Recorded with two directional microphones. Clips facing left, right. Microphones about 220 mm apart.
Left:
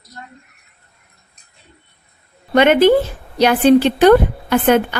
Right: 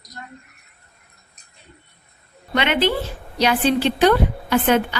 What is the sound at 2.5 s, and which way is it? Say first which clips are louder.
A woman's voice: left 9 dB; 45° left (ahead or behind).